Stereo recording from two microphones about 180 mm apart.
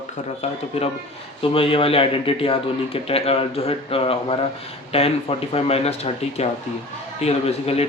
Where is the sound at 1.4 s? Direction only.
30° left (ahead or behind).